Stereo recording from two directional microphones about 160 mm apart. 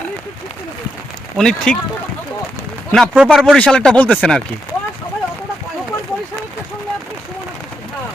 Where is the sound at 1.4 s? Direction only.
5° left (ahead or behind).